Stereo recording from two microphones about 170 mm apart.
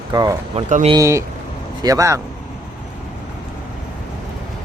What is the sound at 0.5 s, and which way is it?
Speech, 45° right (ahead or behind).